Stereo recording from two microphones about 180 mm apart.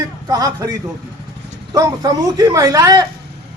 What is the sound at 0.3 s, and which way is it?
A man's voice, 20° right (ahead or behind).